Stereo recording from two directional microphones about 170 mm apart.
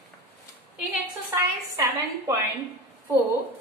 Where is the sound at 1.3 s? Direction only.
15° right (ahead or behind).